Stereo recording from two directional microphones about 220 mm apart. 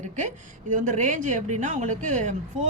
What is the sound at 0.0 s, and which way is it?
Speech, 35° right (ahead or behind).